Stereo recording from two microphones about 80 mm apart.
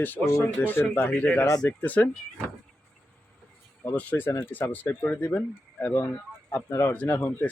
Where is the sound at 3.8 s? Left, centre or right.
Left.